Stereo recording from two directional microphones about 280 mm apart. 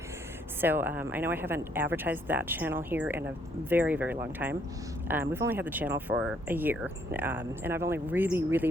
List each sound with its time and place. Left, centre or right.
0.6 s speech: centre